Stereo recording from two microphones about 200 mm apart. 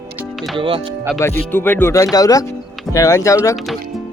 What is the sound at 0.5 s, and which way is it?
Speech, 25° right (ahead or behind).